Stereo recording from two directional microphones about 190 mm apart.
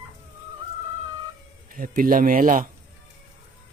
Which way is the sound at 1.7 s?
45° right (ahead or behind).